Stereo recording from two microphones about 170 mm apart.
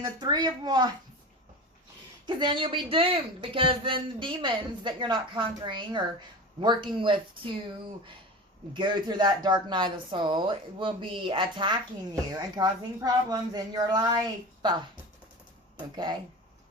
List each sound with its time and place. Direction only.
0.0 s speech: 25° right (ahead or behind)
2.2 s speech: 25° right (ahead or behind)
8.7 s speech: 25° right (ahead or behind)